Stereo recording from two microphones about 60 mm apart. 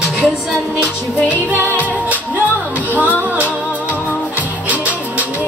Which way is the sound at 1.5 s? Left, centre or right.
Right.